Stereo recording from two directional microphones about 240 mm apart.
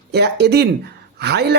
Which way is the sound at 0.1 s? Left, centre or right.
Right.